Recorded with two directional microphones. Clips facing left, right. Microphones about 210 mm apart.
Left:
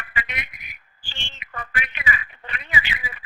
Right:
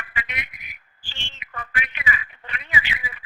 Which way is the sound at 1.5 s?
35° left (ahead or behind).